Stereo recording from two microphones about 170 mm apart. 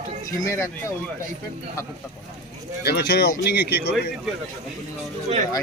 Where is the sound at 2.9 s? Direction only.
75° left (ahead or behind).